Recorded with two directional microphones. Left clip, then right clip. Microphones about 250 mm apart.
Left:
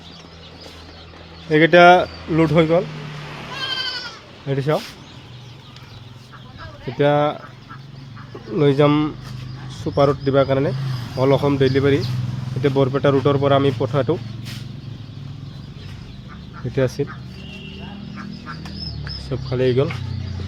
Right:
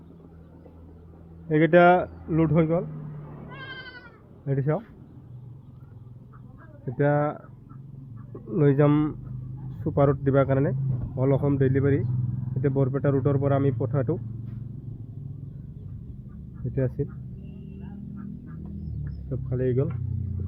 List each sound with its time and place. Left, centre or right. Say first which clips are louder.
1.5 s speech: left 7 dB; centre
3.5 s goat: left 15 dB; left
4.4 s speech: left 7 dB; centre
7.0 s speech: left 7 dB; centre
8.5 s speech: left 6 dB; centre
16.7 s speech: left 9 dB; centre
19.3 s speech: left 8 dB; centre